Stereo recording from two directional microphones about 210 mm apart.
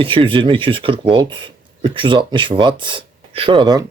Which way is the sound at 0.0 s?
25° right (ahead or behind).